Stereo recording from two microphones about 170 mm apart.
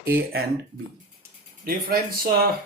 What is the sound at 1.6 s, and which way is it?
Speech, 60° right (ahead or behind).